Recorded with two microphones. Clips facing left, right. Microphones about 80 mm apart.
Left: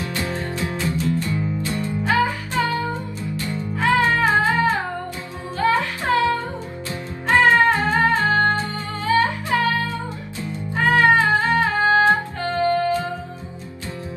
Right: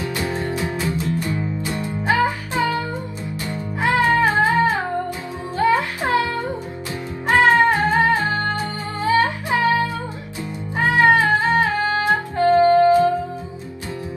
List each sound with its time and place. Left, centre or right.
0.0 s music: right